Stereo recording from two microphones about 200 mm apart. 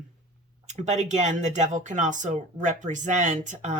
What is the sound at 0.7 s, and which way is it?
Speech, 35° right (ahead or behind).